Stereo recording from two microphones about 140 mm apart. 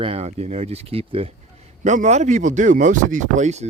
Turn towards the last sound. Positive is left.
turn(degrees=-55)  # may be behind; listen again after turning